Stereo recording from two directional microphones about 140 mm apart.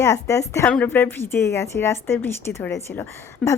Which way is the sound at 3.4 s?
5° left (ahead or behind).